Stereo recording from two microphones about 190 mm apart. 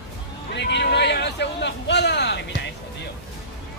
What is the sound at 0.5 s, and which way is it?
A man's voice, 65° left (ahead or behind).